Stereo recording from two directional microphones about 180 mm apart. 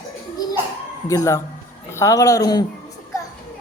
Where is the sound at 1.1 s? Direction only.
20° left (ahead or behind).